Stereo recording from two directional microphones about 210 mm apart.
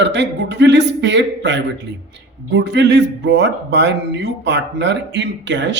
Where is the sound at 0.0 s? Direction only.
55° right (ahead or behind).